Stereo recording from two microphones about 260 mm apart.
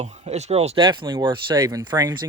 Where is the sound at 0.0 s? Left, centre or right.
Right.